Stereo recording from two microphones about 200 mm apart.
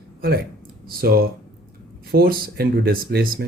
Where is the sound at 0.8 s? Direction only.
50° right (ahead or behind).